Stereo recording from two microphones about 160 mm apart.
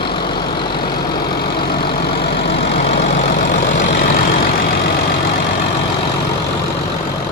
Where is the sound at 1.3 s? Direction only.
85° left.